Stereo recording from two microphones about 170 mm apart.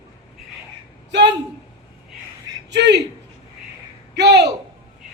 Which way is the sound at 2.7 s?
90° right.